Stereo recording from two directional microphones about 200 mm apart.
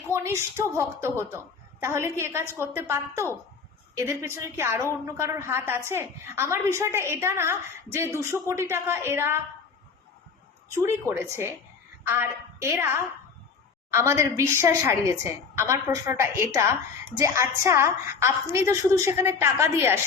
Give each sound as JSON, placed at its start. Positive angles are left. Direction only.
{"t": 0.1, "sound": "a woman's voice", "side_deg": -15}
{"t": 10.8, "sound": "a woman's voice", "side_deg": -10}